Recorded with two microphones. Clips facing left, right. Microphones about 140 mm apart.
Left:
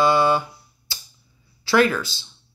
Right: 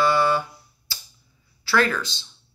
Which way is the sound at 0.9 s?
20° left (ahead or behind).